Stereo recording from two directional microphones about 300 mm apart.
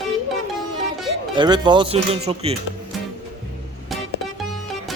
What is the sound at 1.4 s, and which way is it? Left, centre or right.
Speech, centre.